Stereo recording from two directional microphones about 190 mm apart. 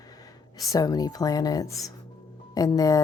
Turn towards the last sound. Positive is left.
turn(degrees=20)  # may be behind; listen again after turning